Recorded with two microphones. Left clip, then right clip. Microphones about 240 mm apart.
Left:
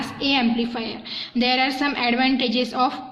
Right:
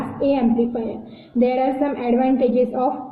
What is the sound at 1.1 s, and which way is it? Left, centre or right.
A woman's voice, left.